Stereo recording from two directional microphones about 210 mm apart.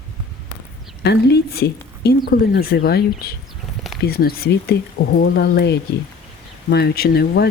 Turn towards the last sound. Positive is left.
turn(degrees=50)  # may be behind; listen again after turning